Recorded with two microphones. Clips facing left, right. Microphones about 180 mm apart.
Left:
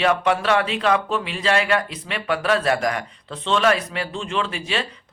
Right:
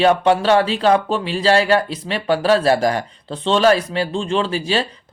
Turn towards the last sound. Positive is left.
turn(degrees=-35)  # may be behind; listen again after turning